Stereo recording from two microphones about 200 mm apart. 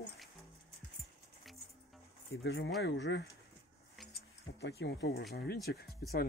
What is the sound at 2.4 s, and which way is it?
Speech, 65° left (ahead or behind).